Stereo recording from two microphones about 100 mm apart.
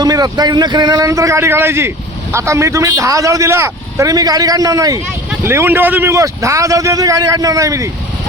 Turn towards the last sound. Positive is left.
turn(degrees=-35)  # may be behind; listen again after turning